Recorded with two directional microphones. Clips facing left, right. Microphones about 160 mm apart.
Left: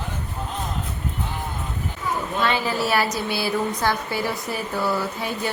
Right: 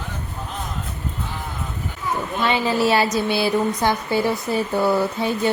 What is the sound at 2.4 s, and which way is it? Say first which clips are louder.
A woman's voice: right 4 dB; 20° right (ahead or behind).